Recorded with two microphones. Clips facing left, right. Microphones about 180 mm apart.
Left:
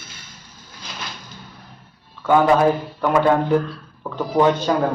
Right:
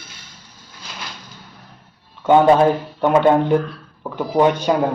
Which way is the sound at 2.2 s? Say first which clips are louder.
Right 3 dB; 25° right (ahead or behind).